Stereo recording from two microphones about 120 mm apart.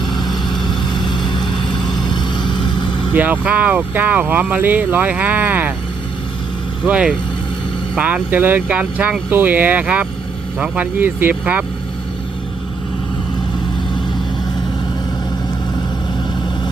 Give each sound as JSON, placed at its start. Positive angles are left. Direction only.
{"t": 0.0, "sound": "vehicle", "side_deg": 40}
{"t": 1.8, "sound": "vehicle", "side_deg": 0}
{"t": 2.0, "sound": "vehicle", "side_deg": 40}
{"t": 3.1, "sound": "speech", "side_deg": -15}
{"t": 6.8, "sound": "speech", "side_deg": -10}